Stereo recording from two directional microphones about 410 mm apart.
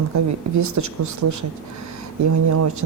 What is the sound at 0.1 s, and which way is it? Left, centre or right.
Speech, right.